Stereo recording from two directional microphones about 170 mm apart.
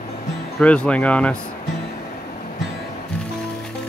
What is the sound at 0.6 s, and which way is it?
Speech, 5° left (ahead or behind).